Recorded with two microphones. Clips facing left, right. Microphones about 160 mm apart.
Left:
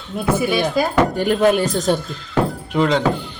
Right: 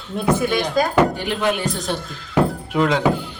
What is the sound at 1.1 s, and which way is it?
Speech, 45° left (ahead or behind).